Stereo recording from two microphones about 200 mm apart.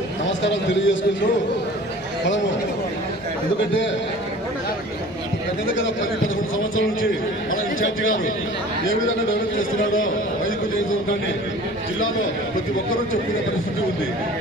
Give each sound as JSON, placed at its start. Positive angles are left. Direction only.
{"t": 0.4, "sound": "a man's voice", "side_deg": 65}
{"t": 6.2, "sound": "a man's voice", "side_deg": 85}
{"t": 9.0, "sound": "a man's voice", "side_deg": 80}